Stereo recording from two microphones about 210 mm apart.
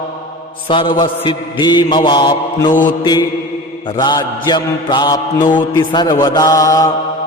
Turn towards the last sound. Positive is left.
turn(degrees=15)  # may be behind; listen again after turning